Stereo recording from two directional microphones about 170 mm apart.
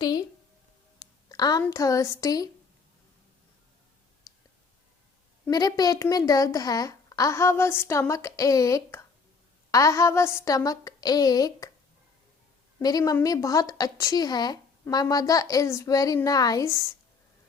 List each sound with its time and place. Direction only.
0.9 s music: 20° left (ahead or behind)
1.6 s a woman's voice: 20° left (ahead or behind)
4.3 s clicking: 20° left (ahead or behind)
5.5 s a woman's voice: 25° left (ahead or behind)
12.8 s a woman's voice: 20° left (ahead or behind)